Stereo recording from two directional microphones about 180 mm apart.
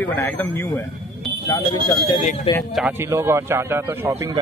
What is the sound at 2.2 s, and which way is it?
Speech, 45° left (ahead or behind).